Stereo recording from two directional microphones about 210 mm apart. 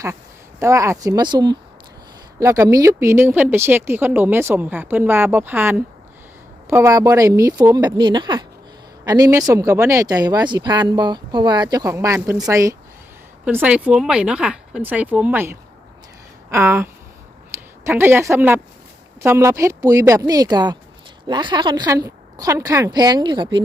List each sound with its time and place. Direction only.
0.6 s a woman's voice: 15° right (ahead or behind)